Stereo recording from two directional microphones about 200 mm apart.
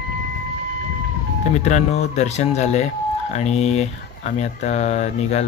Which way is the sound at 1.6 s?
35° left (ahead or behind).